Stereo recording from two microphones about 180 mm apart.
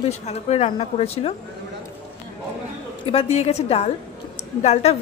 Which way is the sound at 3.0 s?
30° left (ahead or behind).